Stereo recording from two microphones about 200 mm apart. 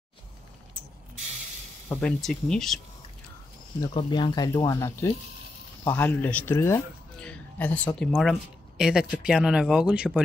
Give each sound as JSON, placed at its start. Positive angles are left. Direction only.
{"t": 1.9, "sound": "speech", "side_deg": 5}
{"t": 3.8, "sound": "speech", "side_deg": 20}